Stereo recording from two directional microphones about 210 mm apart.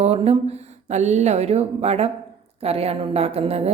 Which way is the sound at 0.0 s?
30° right (ahead or behind).